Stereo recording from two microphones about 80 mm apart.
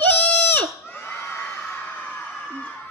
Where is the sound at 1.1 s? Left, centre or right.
Left.